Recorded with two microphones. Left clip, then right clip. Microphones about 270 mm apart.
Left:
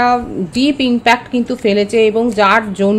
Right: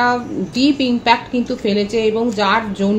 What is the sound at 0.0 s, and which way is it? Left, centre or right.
A woman's voice, left.